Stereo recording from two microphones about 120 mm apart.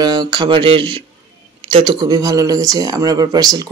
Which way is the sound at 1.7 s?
35° right (ahead or behind).